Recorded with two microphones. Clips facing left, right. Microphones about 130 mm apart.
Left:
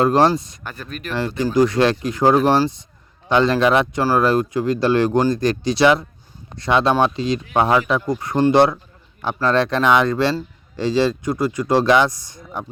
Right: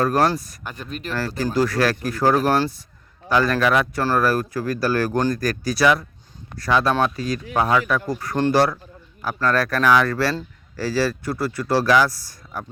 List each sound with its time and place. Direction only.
0.0 s speech: 25° left (ahead or behind)
0.6 s speech: 15° right (ahead or behind)
1.5 s speech: 20° left (ahead or behind)